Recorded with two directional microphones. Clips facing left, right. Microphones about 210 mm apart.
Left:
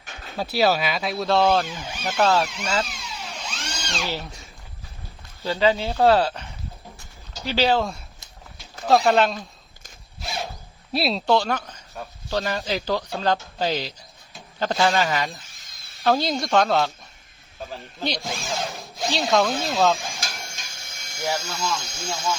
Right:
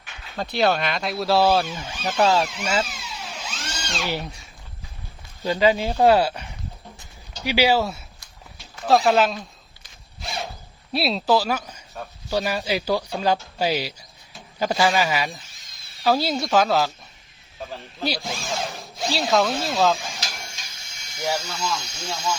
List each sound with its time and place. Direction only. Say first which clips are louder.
0.3 s speech: even; 5° left (ahead or behind)
2.1 s music: right 1 dB; 10° right (ahead or behind)
5.4 s speech: right 1 dB; 15° right (ahead or behind)
10.2 s a sound: even; centre (ahead or behind)
10.9 s speech: even; centre (ahead or behind)
20.6 s electric shaver: left 3 dB; 50° left (ahead or behind)
21.2 s speech: right 1 dB; centre (ahead or behind)
21.8 s speech: left 1 dB; 50° left (ahead or behind)